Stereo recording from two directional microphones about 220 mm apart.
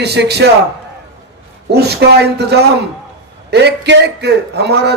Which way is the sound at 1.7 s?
45° right (ahead or behind).